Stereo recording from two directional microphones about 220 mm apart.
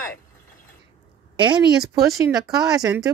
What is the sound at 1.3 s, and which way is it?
A woman's voice, 20° right (ahead or behind).